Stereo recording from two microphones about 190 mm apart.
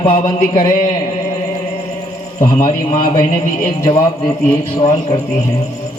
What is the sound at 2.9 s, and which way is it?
Speech, 40° left (ahead or behind).